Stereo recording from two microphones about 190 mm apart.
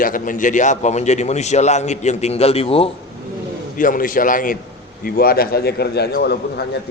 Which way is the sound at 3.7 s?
45° left (ahead or behind).